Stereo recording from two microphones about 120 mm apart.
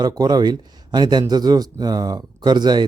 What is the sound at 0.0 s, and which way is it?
Speech, 35° right (ahead or behind).